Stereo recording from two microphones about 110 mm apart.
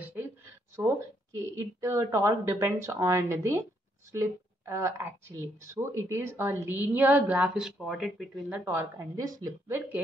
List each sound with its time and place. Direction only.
0.8 s a woman's voice: 25° right (ahead or behind); by 8.3 s 5° right (ahead or behind)
8.6 s speech: 30° right (ahead or behind)